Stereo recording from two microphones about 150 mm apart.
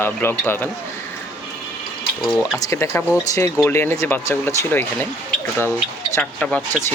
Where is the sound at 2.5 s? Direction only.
20° left (ahead or behind).